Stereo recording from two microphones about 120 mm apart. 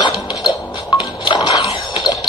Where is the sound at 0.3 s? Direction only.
35° left (ahead or behind).